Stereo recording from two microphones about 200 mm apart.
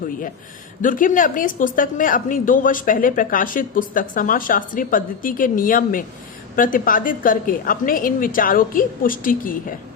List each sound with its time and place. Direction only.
0.8 s a woman's voice: 40° left (ahead or behind)